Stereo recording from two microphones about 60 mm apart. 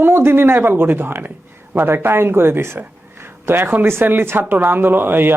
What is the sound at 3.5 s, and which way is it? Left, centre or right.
Speech, right.